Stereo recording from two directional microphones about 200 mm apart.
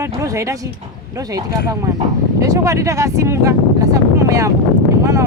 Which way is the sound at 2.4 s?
15° right (ahead or behind).